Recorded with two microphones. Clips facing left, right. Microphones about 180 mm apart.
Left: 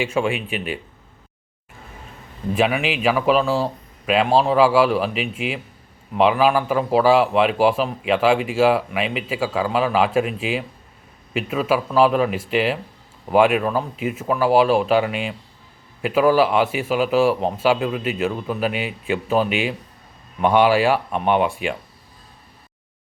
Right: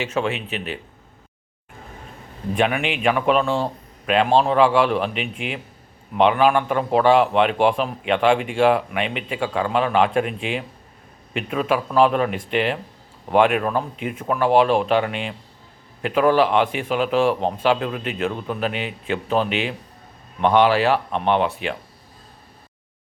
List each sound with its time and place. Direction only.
0.0 s speech: 10° left (ahead or behind)
2.6 s a man's voice: 5° left (ahead or behind)